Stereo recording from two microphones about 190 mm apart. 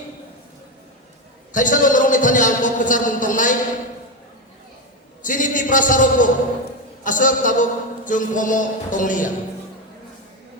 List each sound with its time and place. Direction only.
1.5 s a man's voice: 45° left (ahead or behind)
5.2 s a man's voice: 45° left (ahead or behind)